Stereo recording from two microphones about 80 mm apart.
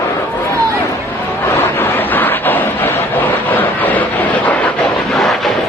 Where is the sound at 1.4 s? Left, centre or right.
Left.